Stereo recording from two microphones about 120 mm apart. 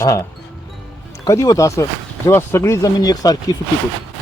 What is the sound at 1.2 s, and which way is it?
Speech, 25° left (ahead or behind).